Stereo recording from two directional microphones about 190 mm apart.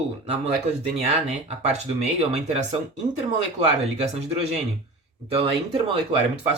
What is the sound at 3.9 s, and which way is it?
Speech, 35° right (ahead or behind).